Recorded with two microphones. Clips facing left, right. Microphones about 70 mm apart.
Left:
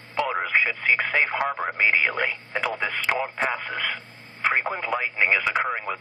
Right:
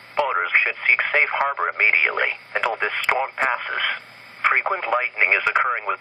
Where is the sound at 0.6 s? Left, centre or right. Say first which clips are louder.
Right 2 dB; right.